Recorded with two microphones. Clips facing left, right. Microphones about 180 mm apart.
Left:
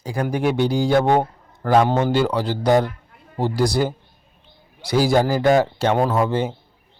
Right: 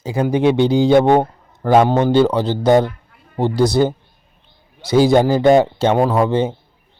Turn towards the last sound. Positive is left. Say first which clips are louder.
# right 4 dB
turn(degrees=-20)  # may be behind; listen again after turning